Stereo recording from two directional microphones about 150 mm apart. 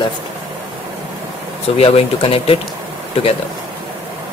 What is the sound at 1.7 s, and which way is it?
Speech, 40° left (ahead or behind).